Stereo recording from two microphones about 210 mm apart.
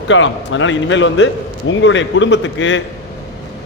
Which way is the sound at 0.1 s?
65° left (ahead or behind).